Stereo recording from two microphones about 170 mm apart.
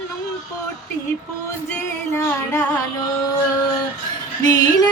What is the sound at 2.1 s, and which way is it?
Music, 15° left (ahead or behind).